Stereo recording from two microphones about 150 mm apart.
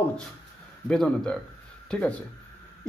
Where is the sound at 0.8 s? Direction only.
5° left (ahead or behind).